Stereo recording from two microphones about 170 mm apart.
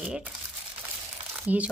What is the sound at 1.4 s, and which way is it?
Speech, 10° right (ahead or behind).